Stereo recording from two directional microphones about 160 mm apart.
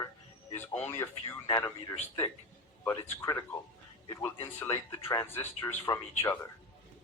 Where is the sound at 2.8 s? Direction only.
15° left (ahead or behind).